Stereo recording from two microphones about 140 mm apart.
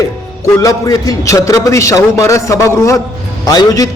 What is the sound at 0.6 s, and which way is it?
A man's voice, 25° left (ahead or behind).